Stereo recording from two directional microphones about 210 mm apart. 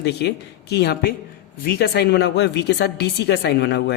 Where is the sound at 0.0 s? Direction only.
50° left (ahead or behind).